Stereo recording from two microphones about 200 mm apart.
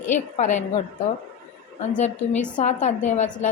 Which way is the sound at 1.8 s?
35° left (ahead or behind).